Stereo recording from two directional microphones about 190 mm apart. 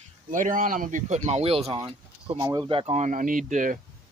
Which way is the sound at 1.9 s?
30° right (ahead or behind).